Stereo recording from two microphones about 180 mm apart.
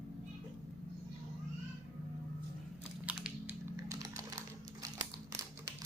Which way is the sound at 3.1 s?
5° right (ahead or behind).